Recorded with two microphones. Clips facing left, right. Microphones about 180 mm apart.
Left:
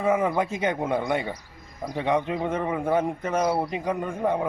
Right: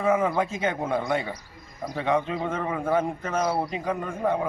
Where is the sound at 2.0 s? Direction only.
15° left (ahead or behind).